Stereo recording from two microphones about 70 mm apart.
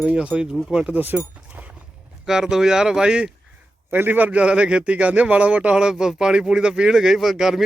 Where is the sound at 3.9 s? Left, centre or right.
Right.